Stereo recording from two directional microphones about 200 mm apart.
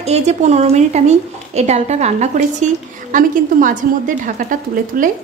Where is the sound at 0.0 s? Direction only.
35° right (ahead or behind).